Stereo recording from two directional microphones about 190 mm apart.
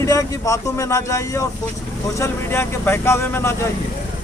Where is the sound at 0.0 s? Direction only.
15° left (ahead or behind).